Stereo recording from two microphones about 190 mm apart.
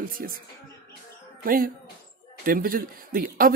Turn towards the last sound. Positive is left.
turn(degrees=-50)  # may be behind; listen again after turning